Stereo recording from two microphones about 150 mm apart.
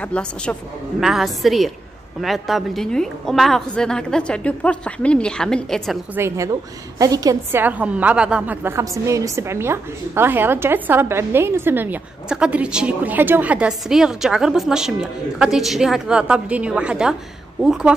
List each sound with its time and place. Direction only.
0.0 s a woman's voice: 5° left (ahead or behind)
6.1 s a woman's voice: 20° right (ahead or behind)
7.6 s a woman's voice: 10° right (ahead or behind)